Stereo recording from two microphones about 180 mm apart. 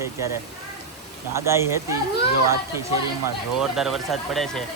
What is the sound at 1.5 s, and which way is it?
Speech, 15° right (ahead or behind).